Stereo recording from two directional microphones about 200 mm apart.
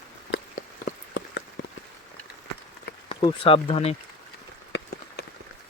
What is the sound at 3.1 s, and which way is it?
Speech, 30° left (ahead or behind).